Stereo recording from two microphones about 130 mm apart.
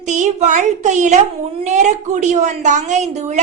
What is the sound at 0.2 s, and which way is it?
A woman's voice, 70° right (ahead or behind).